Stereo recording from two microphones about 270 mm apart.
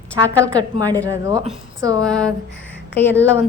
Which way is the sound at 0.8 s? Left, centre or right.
Centre.